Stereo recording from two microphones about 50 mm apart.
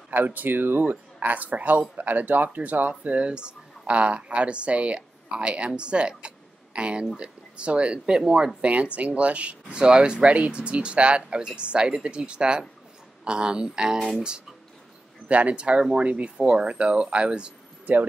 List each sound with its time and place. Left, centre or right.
0.1 s speech: right
1.2 s speech: right; by 13.9 s centre
15.2 s speech: right